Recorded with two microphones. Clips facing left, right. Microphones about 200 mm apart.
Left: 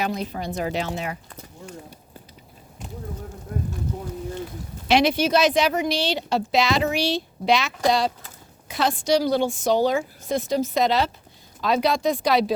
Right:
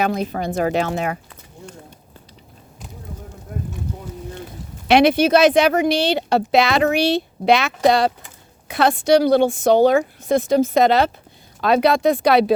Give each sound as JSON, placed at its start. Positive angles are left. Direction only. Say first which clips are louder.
{"t": 0.0, "sound": "speech", "louder": "right 6 dB", "side_deg": -55}
{"t": 4.9, "sound": "speech", "louder": "right 6 dB", "side_deg": -60}